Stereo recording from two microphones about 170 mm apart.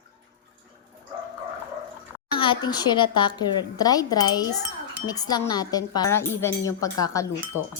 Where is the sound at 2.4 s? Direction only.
25° left (ahead or behind).